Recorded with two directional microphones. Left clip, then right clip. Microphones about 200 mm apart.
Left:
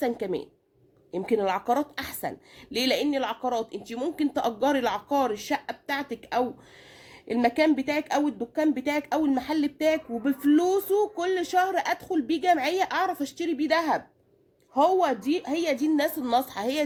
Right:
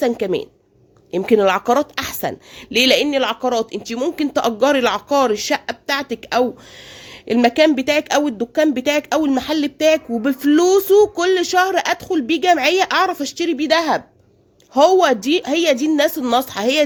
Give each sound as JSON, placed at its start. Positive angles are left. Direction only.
{"t": 0.0, "sound": "a woman's voice", "side_deg": -40}